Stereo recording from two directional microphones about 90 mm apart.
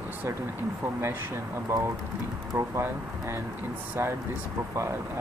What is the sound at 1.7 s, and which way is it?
Speech, 30° right (ahead or behind).